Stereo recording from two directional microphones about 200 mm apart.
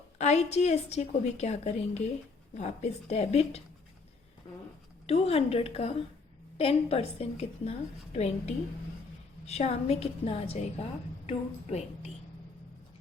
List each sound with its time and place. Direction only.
0.2 s a woman's voice: 35° left (ahead or behind)
4.4 s a sound: 30° left (ahead or behind)
5.0 s a woman's voice: 30° left (ahead or behind)